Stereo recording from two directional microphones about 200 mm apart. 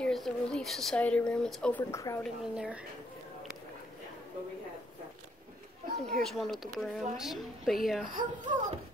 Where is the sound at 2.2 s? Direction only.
5° right (ahead or behind).